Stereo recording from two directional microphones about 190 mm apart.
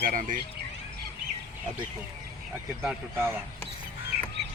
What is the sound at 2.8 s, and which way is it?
Speech, 10° right (ahead or behind).